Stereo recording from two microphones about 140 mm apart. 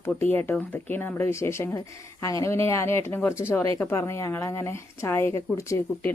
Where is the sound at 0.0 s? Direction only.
15° left (ahead or behind).